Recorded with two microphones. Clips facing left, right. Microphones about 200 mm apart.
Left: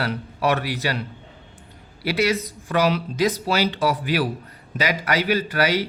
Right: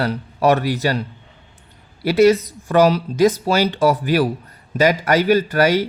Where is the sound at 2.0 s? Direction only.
45° right (ahead or behind).